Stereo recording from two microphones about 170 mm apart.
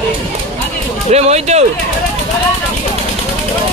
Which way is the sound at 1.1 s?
40° right (ahead or behind).